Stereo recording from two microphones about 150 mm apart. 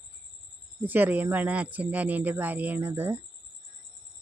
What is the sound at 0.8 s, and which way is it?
Speech, 10° right (ahead or behind).